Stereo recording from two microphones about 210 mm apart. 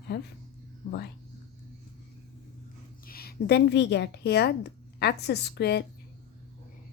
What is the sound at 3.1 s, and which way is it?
A woman's voice, 45° left (ahead or behind).